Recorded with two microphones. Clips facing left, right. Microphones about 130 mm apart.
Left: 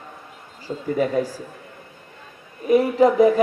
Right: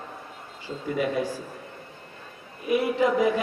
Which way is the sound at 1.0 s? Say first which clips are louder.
Left 5 dB; 40° left (ahead or behind).